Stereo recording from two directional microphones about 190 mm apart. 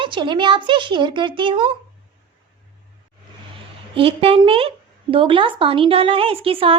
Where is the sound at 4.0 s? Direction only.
30° right (ahead or behind).